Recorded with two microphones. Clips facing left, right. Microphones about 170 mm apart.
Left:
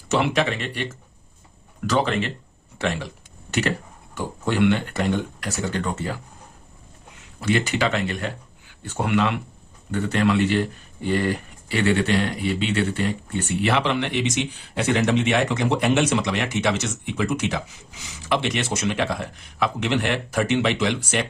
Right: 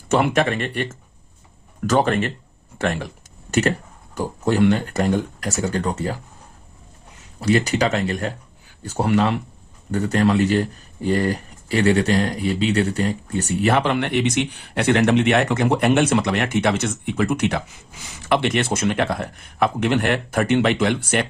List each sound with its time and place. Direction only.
0.1 s speech: 50° right (ahead or behind)
1.9 s speech: 45° right (ahead or behind)
4.1 s speech: 40° right (ahead or behind)
7.2 s speech: 40° right (ahead or behind)